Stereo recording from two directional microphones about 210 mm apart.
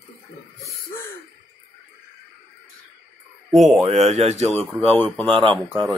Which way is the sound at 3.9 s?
30° right (ahead or behind).